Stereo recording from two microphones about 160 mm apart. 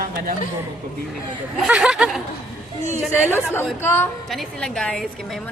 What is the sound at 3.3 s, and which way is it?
Speech, 15° left (ahead or behind).